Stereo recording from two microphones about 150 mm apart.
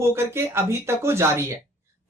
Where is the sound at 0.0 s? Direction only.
15° right (ahead or behind).